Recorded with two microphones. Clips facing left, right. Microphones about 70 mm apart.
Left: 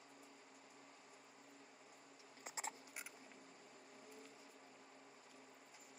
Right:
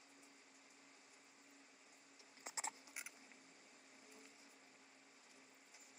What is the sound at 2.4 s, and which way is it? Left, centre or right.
Patter, left.